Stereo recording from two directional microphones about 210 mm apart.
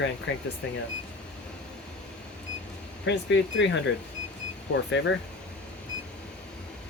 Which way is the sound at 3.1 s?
60° left (ahead or behind).